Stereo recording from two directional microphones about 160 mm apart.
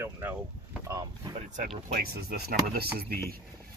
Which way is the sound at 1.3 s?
50° right (ahead or behind).